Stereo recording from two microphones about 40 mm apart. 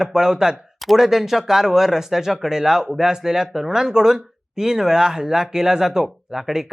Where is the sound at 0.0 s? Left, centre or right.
Centre.